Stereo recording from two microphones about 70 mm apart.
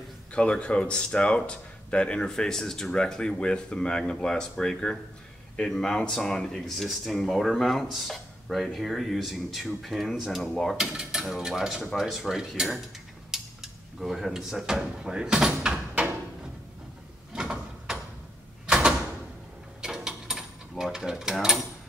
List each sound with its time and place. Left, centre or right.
0.3 s speech: centre
10.8 s mechanisms: centre
12.0 s speech: centre
13.3 s dishes: centre
15.9 s a sound: right
17.3 s sliding door: centre
18.7 s door: centre
19.8 s mechanisms: centre